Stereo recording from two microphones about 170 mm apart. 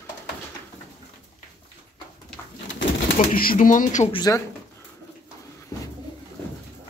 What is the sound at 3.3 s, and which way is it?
Speech, 55° left (ahead or behind).